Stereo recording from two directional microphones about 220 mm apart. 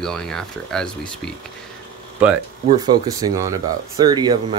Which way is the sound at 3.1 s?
15° right (ahead or behind).